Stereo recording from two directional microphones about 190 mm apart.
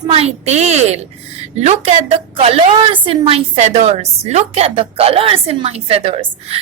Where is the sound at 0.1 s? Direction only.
35° right (ahead or behind).